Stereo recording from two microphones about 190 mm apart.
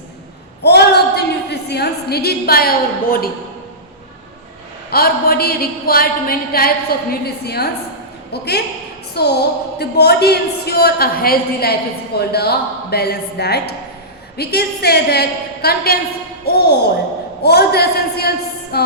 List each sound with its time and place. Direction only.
0.6 s a woman's voice: 60° left (ahead or behind)
4.9 s a sound: 50° left (ahead or behind)
8.3 s a woman's voice: 60° left (ahead or behind)